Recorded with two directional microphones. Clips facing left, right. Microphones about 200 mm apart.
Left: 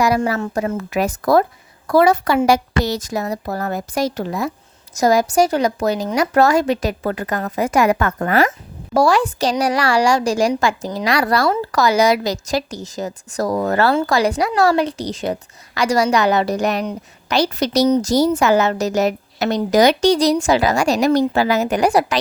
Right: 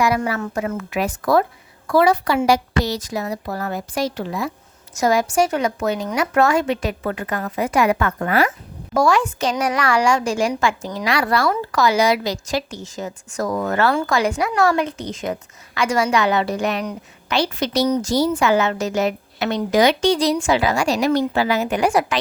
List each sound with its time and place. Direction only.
0.0 s a woman's voice: 40° left (ahead or behind)